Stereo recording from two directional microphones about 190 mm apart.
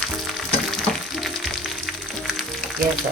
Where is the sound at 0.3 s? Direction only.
Centre (ahead or behind).